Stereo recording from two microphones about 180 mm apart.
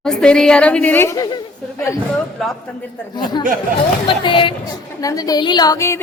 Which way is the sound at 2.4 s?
Centre (ahead or behind).